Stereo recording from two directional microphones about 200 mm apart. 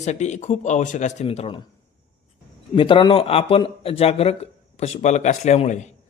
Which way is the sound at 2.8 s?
25° left (ahead or behind).